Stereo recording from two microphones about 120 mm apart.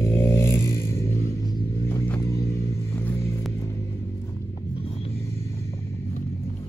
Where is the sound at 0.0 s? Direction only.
20° left (ahead or behind).